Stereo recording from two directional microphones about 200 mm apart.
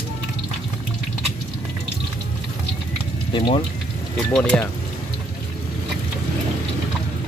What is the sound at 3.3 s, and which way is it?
Speech, 25° left (ahead or behind).